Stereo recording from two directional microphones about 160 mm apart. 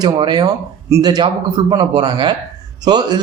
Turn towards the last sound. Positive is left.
turn(degrees=-25)  # may be behind; listen again after turning